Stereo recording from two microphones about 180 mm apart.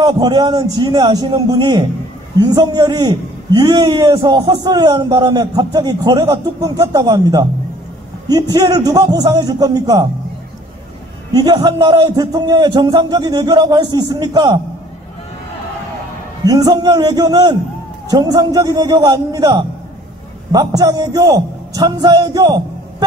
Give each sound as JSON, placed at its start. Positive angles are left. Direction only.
{"t": 0.0, "sound": "a man's voice", "side_deg": -25}
{"t": 11.3, "sound": "a man's voice", "side_deg": -25}
{"t": 16.4, "sound": "a man's voice", "side_deg": -20}